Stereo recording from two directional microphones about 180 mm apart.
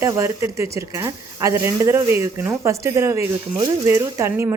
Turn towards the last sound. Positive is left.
turn(degrees=-15)  # may be behind; listen again after turning